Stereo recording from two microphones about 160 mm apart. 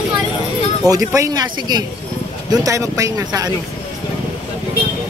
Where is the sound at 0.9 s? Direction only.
20° right (ahead or behind).